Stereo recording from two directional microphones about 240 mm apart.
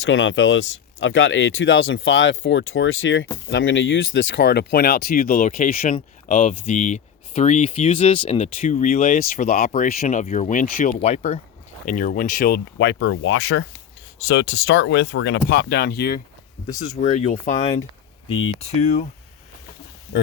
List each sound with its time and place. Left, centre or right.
0.0 s speech: left
17.0 s speech: left